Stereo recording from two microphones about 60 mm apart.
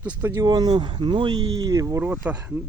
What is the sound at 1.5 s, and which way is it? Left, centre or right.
Speech, right.